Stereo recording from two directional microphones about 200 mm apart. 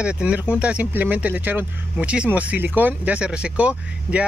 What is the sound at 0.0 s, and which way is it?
Speech, 5° right (ahead or behind).